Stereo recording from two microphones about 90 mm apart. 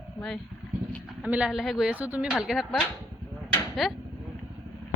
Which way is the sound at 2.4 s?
5° right (ahead or behind).